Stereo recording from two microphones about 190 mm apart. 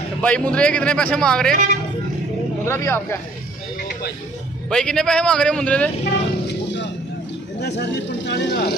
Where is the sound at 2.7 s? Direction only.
15° left (ahead or behind).